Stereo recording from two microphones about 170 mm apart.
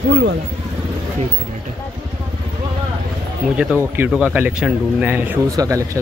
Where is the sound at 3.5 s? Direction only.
10° right (ahead or behind).